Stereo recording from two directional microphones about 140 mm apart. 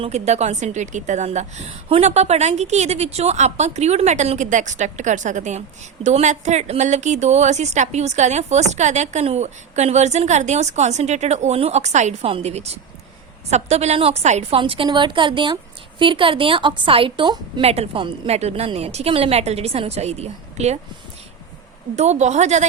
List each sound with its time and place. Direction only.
0.0 s a woman's voice: 50° right (ahead or behind)
14.6 s a woman's voice: 35° right (ahead or behind)
17.6 s a woman's voice: 50° right (ahead or behind)
21.9 s a woman's voice: 55° right (ahead or behind)